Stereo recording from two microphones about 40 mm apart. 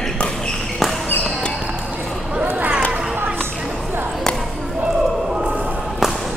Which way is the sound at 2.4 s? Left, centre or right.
Right.